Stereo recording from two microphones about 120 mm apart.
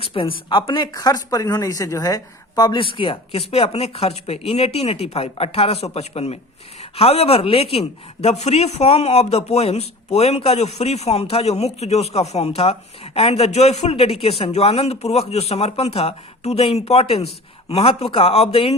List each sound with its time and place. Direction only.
0.0 s speech: 50° left (ahead or behind)
0.7 s a woman's voice: 35° left (ahead or behind); by 18.7 s 55° left (ahead or behind)